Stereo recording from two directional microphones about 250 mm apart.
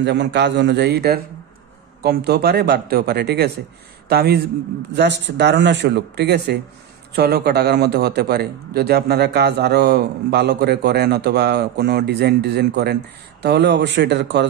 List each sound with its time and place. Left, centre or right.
0.0 s a man's voice: right